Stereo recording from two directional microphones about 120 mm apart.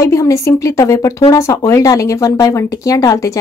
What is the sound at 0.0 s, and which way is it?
Speech, 25° left (ahead or behind).